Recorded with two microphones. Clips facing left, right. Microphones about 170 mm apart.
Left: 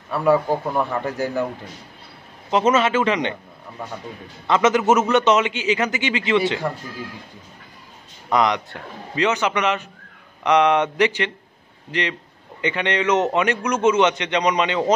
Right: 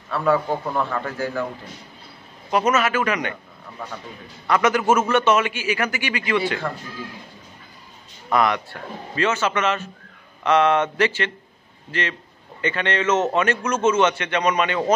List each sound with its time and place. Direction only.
0.1 s a man's voice: 15° left (ahead or behind)
2.5 s a man's voice: 25° left (ahead or behind)
4.5 s a man's voice: 20° left (ahead or behind)
8.3 s a man's voice: 20° left (ahead or behind)